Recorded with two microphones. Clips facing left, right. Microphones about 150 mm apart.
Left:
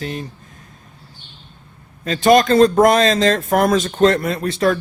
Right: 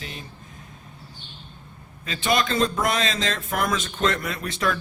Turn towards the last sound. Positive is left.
turn(degrees=35)  # may be behind; listen again after turning